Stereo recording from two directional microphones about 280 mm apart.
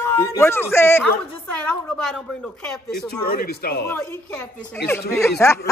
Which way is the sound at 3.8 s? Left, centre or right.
Centre.